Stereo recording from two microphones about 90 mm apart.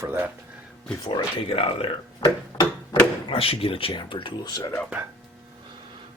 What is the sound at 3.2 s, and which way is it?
Speech, 90° left.